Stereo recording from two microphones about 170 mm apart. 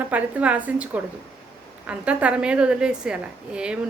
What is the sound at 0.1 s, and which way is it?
A woman's voice, 10° right (ahead or behind).